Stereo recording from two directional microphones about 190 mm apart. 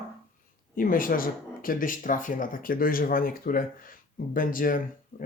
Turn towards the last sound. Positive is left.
turn(degrees=45)  # may be behind; listen again after turning